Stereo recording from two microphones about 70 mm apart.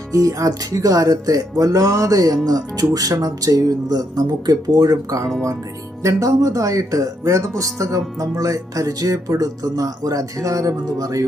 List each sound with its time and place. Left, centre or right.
0.1 s music: right
6.0 s speech: right
7.6 s music: right